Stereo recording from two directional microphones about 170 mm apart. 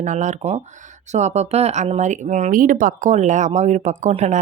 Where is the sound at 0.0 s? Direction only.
45° right (ahead or behind).